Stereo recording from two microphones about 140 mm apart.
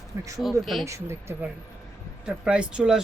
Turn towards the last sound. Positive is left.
turn(degrees=-5)  # may be behind; listen again after turning